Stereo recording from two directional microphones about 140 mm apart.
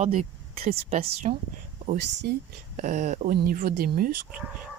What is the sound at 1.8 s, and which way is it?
Speech, 85° right.